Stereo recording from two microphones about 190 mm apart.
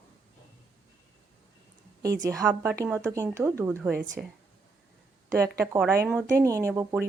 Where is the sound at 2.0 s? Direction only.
20° right (ahead or behind).